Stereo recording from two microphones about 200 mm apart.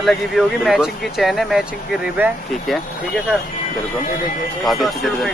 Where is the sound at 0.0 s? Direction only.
Centre (ahead or behind).